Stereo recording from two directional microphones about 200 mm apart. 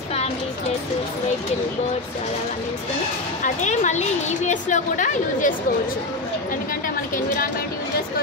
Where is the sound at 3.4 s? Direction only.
35° left (ahead or behind).